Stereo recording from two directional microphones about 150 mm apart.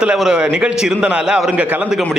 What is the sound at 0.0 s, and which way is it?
A man's voice, 5° right (ahead or behind).